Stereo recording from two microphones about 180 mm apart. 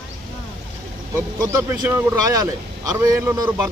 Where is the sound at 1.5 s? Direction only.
15° right (ahead or behind).